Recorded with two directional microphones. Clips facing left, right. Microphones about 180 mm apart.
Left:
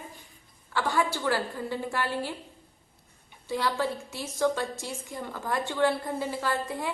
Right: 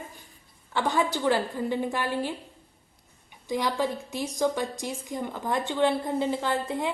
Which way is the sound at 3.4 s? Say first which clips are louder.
Right 2 dB; 15° right (ahead or behind).